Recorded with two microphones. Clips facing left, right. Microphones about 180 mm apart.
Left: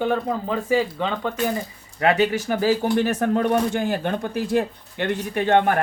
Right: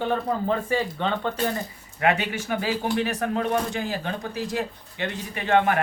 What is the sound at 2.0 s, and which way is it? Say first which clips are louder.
Speech: left 5 dB; 35° left (ahead or behind).